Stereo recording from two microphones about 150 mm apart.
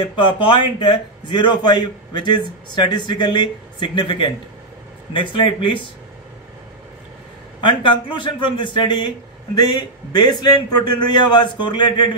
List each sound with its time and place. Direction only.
0.2 s a man's voice: 35° left (ahead or behind)
7.6 s a man's voice: 35° left (ahead or behind)